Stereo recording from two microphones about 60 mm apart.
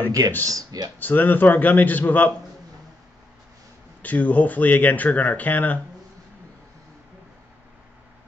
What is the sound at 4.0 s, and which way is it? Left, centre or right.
Speech, left.